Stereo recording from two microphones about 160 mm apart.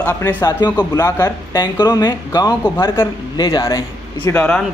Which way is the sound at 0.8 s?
25° left (ahead or behind).